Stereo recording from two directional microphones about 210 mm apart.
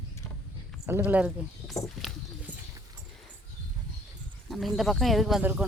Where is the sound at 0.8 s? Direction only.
10° right (ahead or behind).